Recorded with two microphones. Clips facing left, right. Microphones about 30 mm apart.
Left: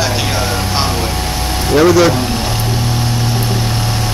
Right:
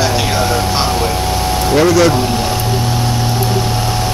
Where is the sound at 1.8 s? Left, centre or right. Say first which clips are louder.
Left 2 dB; centre.